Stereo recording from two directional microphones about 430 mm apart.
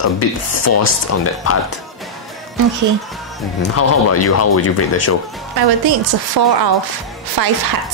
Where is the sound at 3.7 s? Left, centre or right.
Left.